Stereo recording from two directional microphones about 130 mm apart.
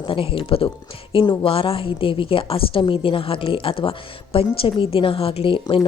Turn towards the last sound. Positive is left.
turn(degrees=45)  # may be behind; listen again after turning